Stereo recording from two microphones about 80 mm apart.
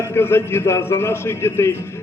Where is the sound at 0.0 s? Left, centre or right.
Left.